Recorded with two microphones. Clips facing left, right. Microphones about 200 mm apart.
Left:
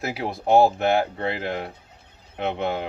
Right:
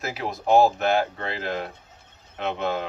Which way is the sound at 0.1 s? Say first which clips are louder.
Left 1 dB; 25° left (ahead or behind).